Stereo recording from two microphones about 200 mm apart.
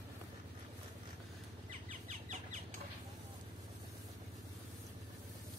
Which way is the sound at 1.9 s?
35° right (ahead or behind).